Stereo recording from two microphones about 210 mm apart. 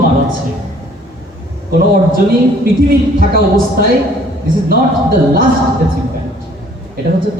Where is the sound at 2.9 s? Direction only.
45° right (ahead or behind).